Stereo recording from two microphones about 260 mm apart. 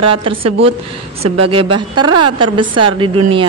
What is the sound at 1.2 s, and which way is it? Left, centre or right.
A woman's voice, right.